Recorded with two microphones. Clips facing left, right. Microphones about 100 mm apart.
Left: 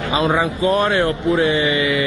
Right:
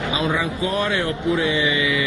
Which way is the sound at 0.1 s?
55° left (ahead or behind).